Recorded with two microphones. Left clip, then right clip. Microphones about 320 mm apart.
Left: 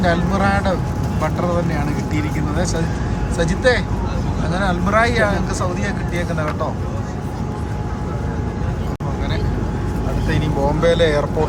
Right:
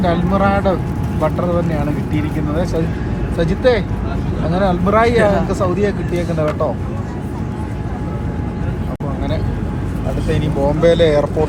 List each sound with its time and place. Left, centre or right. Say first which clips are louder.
0.0 s speech: right 2 dB; centre
3.3 s speech: right 2 dB; centre
10.3 s speech: right 2 dB; centre